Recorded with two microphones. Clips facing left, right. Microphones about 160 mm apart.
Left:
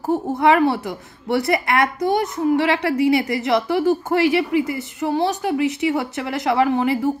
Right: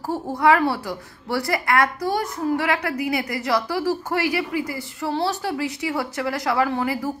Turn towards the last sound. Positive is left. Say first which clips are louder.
# left 5 dB
turn(degrees=25)  # may be behind; listen again after turning